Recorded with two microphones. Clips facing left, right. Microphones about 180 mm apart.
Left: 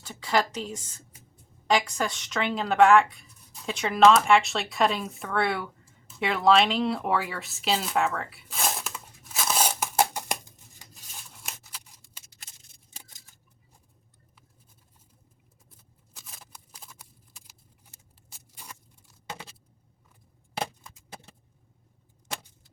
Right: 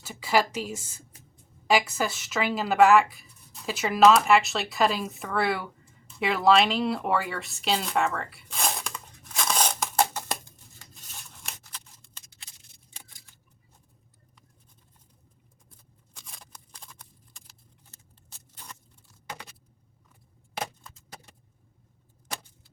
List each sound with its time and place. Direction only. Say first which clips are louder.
0.0 s a woman's voice: right 1 dB; 10° right (ahead or behind); by 10.3 s 10° left (ahead or behind)
10.8 s scissors: even; 5° left (ahead or behind)
12.5 s shuffling cards: even; 45° left (ahead or behind)
16.1 s scissors: even; 5° left (ahead or behind)
17.9 s a sound: even; 10° left (ahead or behind)